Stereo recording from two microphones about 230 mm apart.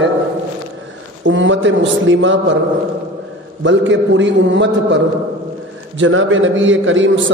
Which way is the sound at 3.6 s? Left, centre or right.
Right.